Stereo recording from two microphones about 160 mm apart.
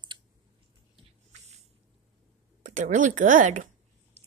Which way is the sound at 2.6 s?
50° right (ahead or behind).